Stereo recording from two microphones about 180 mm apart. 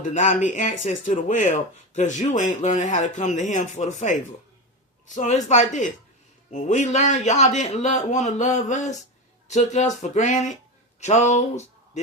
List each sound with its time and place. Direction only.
0.0 s a man's voice: 45° left (ahead or behind)